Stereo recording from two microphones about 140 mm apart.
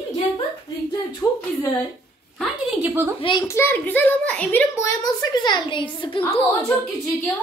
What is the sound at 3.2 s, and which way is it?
Speech, 35° left (ahead or behind).